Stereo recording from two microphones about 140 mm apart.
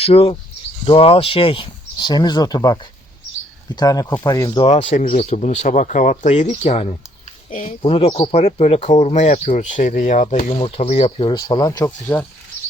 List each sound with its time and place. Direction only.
0.0 s speech: 45° left (ahead or behind)
5.0 s speech: 55° left (ahead or behind)
7.8 s speech: 40° left (ahead or behind)
11.9 s speech: 15° left (ahead or behind)